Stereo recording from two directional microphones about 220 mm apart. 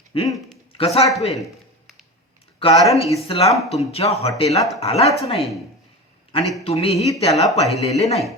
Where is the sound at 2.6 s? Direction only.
25° left (ahead or behind).